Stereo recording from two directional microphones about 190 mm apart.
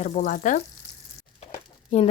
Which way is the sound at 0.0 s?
40° left (ahead or behind).